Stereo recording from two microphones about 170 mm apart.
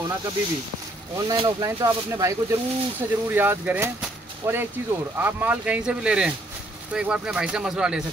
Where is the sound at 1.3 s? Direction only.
30° right (ahead or behind).